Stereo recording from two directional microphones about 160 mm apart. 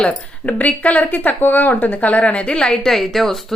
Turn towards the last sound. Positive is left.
turn(degrees=0)  # may be behind; listen again after turning